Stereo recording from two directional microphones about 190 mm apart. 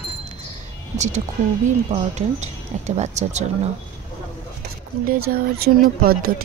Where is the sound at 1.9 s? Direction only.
35° right (ahead or behind).